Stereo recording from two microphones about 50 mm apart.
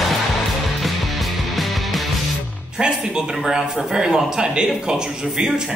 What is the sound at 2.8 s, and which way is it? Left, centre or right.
Speech, centre.